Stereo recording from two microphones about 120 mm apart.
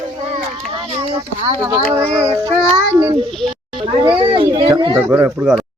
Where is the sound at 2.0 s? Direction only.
20° right (ahead or behind).